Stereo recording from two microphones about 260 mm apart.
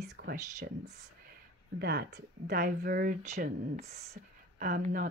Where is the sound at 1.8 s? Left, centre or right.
Right.